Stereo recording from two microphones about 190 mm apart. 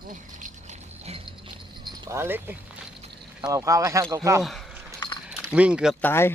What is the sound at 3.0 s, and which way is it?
Vehicle, 25° right (ahead or behind).